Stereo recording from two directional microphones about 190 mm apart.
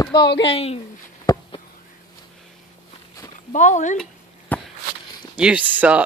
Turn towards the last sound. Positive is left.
turn(degrees=-5)  # may be behind; listen again after turning